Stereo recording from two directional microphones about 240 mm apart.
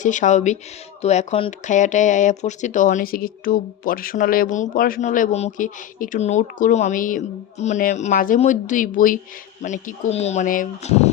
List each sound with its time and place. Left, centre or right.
0.0 s speech: left